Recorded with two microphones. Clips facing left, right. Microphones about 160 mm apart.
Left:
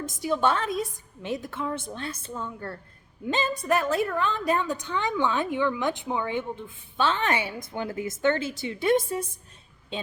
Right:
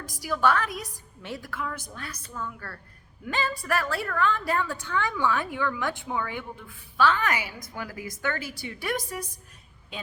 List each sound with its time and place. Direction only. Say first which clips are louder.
0.0 s a woman's voice: left 1 dB; 25° left (ahead or behind)